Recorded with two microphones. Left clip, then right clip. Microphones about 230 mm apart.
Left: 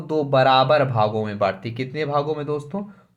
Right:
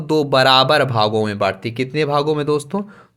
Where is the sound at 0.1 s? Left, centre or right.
Right.